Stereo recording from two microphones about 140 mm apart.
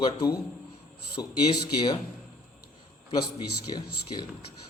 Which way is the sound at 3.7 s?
30° left (ahead or behind).